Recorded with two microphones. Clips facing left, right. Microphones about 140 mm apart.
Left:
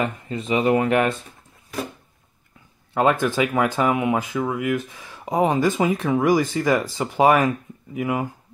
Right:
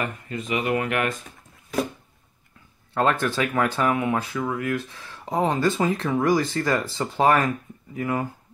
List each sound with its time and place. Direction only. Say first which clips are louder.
0.3 s speech: left 5 dB; 30° left (ahead or behind)
2.9 s speech: left 3 dB; 15° left (ahead or behind)